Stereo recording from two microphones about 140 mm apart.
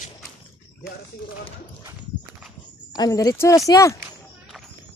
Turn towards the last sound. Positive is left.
turn(degrees=20)  # may be behind; listen again after turning